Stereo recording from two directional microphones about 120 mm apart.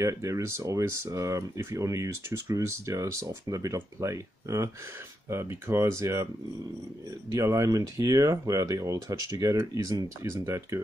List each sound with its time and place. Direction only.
0.0 s speech: 25° right (ahead or behind)
7.3 s speech: 25° right (ahead or behind)
10.4 s speech: 20° right (ahead or behind)